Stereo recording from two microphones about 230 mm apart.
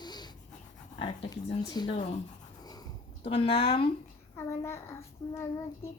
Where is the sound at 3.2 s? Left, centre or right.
Left.